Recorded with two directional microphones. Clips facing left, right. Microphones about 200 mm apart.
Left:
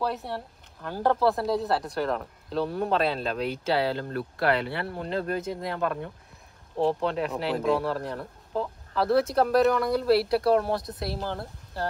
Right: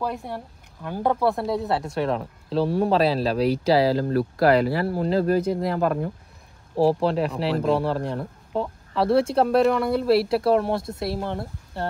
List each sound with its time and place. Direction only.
0.0 s speech: centre (ahead or behind)
1.9 s speech: 25° right (ahead or behind)
7.3 s speech: centre (ahead or behind)
7.8 s speech: 30° right (ahead or behind)
10.0 s speech: centre (ahead or behind)
10.3 s speech: 25° right (ahead or behind)